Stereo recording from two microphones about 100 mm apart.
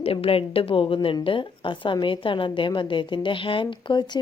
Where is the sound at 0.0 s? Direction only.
70° left (ahead or behind).